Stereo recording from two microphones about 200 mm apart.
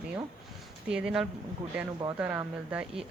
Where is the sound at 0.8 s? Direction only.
5° right (ahead or behind).